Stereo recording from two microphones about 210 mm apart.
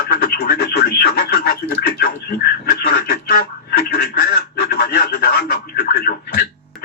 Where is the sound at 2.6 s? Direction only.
45° left (ahead or behind).